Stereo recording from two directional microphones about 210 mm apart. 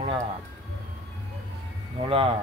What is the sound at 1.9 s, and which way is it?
Speech, 25° right (ahead or behind).